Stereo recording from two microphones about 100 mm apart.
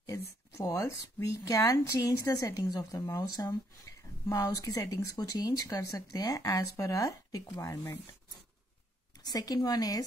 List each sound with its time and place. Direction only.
0.0 s speech: 30° left (ahead or behind)
9.2 s speech: 40° left (ahead or behind)